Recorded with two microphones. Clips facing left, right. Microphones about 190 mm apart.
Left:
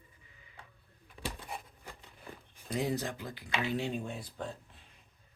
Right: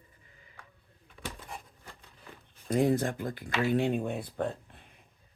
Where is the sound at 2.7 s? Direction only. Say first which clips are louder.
Right 7 dB; 50° right (ahead or behind).